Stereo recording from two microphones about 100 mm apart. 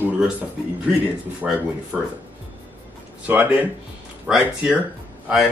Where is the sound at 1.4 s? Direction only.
10° right (ahead or behind).